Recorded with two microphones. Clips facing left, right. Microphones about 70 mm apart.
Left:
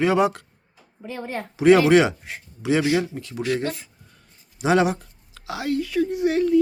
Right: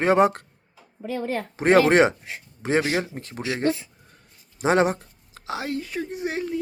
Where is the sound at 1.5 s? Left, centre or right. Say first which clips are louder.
Left 3 dB; right.